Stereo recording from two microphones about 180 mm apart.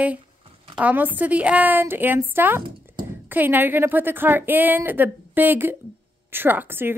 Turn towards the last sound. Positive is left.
turn(degrees=-10)  # may be behind; listen again after turning